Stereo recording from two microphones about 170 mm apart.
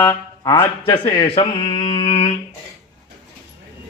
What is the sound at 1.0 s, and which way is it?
Speech, 30° left (ahead or behind).